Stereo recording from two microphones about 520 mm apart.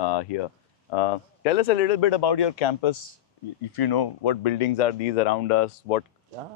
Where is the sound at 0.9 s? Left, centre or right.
Left.